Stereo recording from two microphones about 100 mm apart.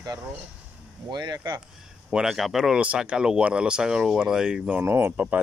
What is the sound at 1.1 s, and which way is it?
Speech, 40° right (ahead or behind).